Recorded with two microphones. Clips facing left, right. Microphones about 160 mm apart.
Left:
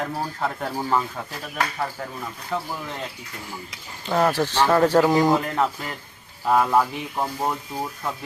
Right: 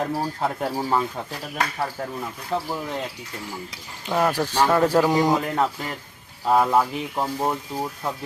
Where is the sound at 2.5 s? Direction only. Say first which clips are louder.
Right 2 dB; 25° right (ahead or behind).